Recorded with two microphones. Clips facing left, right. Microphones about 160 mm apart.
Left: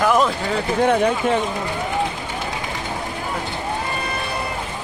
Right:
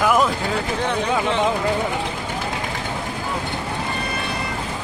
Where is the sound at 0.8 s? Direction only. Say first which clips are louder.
Left 5 dB; 50° left (ahead or behind).